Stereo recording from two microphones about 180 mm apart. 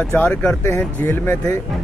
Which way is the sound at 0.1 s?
5° left (ahead or behind).